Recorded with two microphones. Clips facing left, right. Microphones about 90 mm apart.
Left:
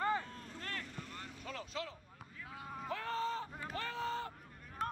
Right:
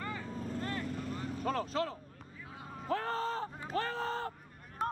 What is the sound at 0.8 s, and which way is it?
Vehicle, 40° right (ahead or behind).